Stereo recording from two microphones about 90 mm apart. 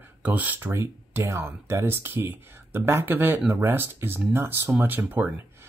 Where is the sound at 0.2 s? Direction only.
20° right (ahead or behind).